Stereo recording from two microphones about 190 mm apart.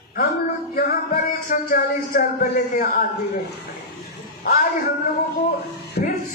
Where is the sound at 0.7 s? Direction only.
50° left (ahead or behind).